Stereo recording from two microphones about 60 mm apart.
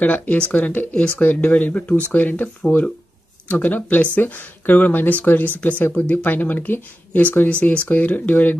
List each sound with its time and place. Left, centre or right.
0.0 s speech: left